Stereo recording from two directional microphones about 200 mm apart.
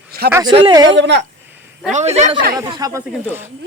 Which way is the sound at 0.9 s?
65° right (ahead or behind).